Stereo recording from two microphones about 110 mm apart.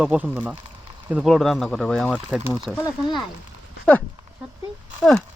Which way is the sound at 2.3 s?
15° right (ahead or behind).